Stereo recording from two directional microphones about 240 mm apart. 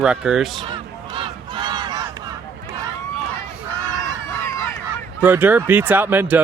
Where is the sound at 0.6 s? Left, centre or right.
Right.